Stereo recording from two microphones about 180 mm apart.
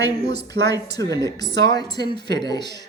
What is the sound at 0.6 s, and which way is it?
Speech, 65° right (ahead or behind).